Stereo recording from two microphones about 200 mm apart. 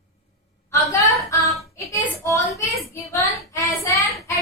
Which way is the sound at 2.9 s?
15° left (ahead or behind).